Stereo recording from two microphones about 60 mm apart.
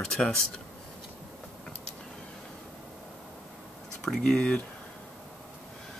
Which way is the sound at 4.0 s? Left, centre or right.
Centre.